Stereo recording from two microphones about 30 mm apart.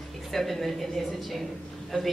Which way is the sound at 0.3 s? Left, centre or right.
Centre.